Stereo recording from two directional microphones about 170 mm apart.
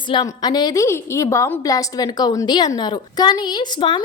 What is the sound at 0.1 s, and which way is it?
A woman's voice, 25° left (ahead or behind).